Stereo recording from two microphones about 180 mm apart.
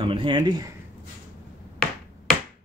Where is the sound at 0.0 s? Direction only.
30° right (ahead or behind).